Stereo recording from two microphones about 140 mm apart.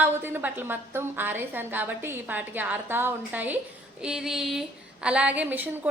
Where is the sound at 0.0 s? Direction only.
15° right (ahead or behind).